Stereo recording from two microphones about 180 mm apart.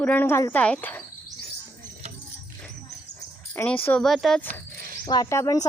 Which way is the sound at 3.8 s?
5° left (ahead or behind).